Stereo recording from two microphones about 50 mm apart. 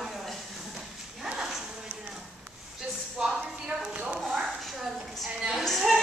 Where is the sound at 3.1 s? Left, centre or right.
Centre.